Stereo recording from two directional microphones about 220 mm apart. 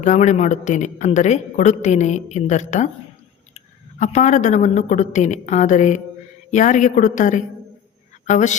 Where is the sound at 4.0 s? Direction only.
35° left (ahead or behind).